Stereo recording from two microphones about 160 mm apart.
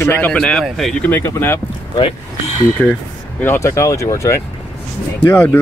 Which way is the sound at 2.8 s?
5° left (ahead or behind).